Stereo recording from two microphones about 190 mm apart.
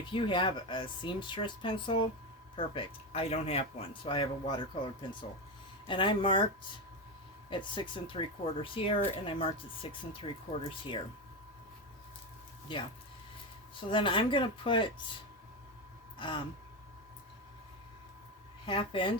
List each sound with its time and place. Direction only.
0.1 s speech: 25° left (ahead or behind)
7.5 s speech: 25° left (ahead or behind)
12.7 s speech: 25° left (ahead or behind)
16.1 s speech: 25° left (ahead or behind)
18.6 s speech: 25° left (ahead or behind)